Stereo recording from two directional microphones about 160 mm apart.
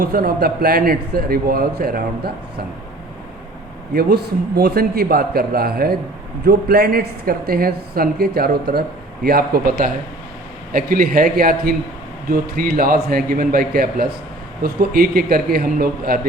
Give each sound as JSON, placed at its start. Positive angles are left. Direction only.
{"t": 0.0, "sound": "speech", "side_deg": -75}
{"t": 3.9, "sound": "speech", "side_deg": -90}